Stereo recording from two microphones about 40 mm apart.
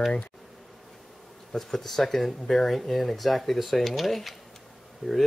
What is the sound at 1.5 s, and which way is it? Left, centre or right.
Speech, centre.